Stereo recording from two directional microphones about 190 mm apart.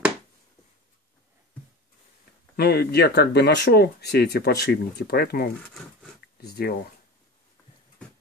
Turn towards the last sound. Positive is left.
turn(degrees=55)  # may be behind; listen again after turning